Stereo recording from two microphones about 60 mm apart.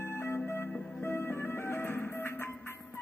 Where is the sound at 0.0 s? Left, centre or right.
Left.